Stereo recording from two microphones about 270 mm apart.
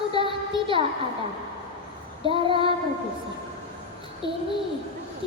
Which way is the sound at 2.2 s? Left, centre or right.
Centre.